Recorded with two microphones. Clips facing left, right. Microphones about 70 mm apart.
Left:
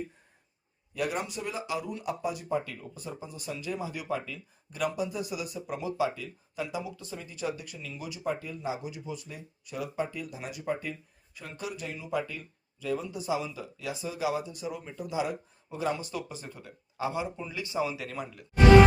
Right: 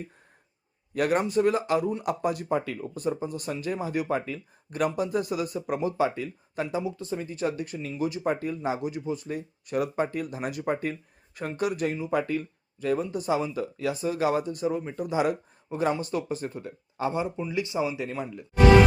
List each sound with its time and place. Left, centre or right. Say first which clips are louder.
0.9 s speech: right 9 dB; right
14.9 s speech: right 3 dB; right
15.7 s speech: right 5 dB; right
17.7 s speech: left 1 dB; right